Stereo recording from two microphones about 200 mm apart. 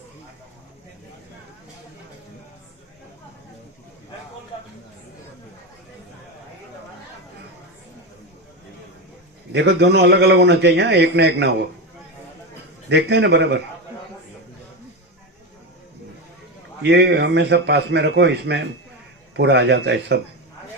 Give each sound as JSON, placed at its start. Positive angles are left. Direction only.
{"t": 9.5, "sound": "a man's voice", "side_deg": -60}
{"t": 12.9, "sound": "a man's voice", "side_deg": -55}
{"t": 16.8, "sound": "a man's voice", "side_deg": -60}